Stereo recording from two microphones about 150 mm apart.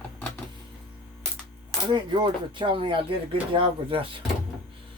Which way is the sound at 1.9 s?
30° right (ahead or behind).